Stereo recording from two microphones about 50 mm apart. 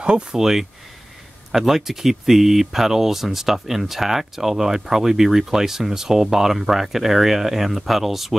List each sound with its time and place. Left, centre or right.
0.0 s speech: centre
0.4 s speech: centre